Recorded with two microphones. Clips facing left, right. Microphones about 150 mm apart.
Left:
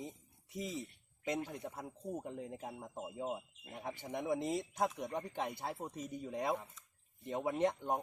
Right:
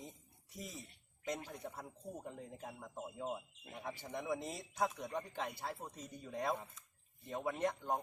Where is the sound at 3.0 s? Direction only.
15° left (ahead or behind).